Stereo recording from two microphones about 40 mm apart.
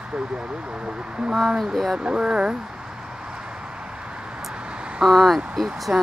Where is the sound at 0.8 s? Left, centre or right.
Right.